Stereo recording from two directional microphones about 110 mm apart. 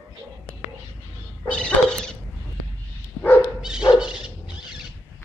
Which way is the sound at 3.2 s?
15° left (ahead or behind).